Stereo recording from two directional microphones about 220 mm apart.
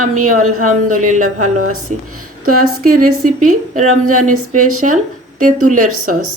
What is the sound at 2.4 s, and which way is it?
Speech, 90° right.